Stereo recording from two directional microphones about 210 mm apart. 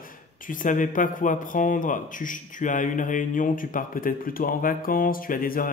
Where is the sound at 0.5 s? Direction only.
40° left (ahead or behind).